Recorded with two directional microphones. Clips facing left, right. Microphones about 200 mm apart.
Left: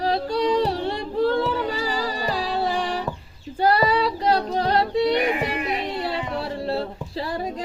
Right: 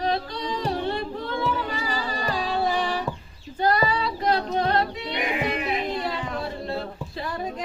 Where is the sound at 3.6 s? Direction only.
35° left (ahead or behind).